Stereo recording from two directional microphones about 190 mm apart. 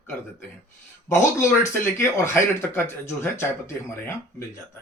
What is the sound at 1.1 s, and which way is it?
Speech, 15° left (ahead or behind).